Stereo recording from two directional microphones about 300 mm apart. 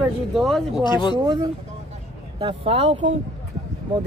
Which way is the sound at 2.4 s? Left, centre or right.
Centre.